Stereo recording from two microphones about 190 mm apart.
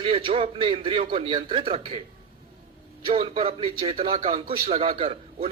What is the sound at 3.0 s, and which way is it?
A man's voice, 30° right (ahead or behind).